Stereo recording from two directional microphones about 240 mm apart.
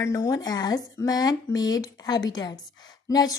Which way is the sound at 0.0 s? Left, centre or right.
Centre.